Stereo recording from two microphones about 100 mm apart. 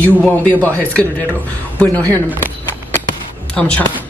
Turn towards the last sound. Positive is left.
turn(degrees=15)  # may be behind; listen again after turning